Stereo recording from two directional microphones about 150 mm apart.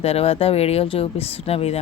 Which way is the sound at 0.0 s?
45° left (ahead or behind).